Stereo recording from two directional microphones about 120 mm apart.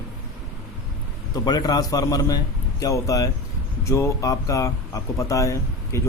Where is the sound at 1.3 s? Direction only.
35° left (ahead or behind).